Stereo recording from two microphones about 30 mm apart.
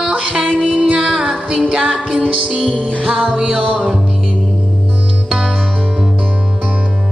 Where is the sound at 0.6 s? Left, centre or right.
Right.